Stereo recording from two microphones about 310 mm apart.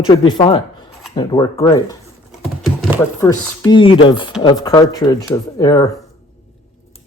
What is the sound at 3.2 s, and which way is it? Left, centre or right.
Speech, centre.